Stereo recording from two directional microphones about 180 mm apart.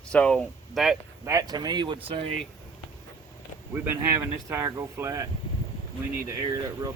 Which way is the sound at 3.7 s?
15° right (ahead or behind).